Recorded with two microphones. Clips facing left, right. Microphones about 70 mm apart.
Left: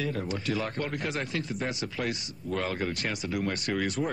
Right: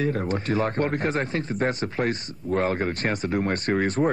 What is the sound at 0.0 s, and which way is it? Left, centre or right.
Speech, right.